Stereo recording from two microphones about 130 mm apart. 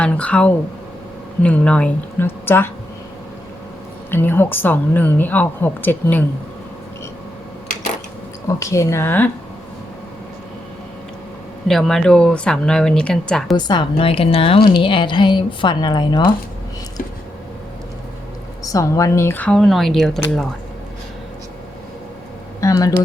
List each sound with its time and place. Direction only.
0.0 s a woman's voice: 10° left (ahead or behind)
4.1 s a woman's voice: 15° left (ahead or behind)
8.4 s speech: 20° left (ahead or behind)
11.7 s speech: centre (ahead or behind)
13.7 s a woman's voice: 40° left (ahead or behind)
18.6 s speech: 25° left (ahead or behind)
19.5 s speech: centre (ahead or behind)
22.6 s speech: 25° left (ahead or behind)